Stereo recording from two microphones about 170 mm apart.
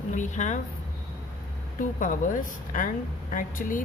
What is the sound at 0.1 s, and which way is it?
Speech, 45° left (ahead or behind).